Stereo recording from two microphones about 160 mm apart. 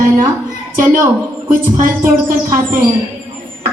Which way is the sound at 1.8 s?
60° right (ahead or behind).